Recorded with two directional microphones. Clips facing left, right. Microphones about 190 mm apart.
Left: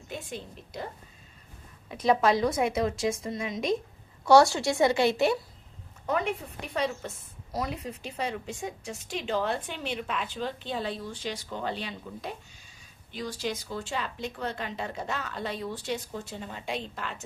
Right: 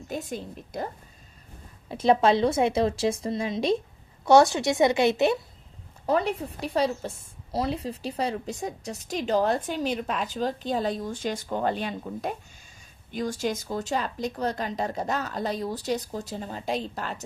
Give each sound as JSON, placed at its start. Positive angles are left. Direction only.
{"t": 0.1, "sound": "a woman's voice", "side_deg": -45}
{"t": 1.9, "sound": "speech", "side_deg": -30}
{"t": 4.3, "sound": "speech", "side_deg": -20}
{"t": 6.1, "sound": "speech", "side_deg": -35}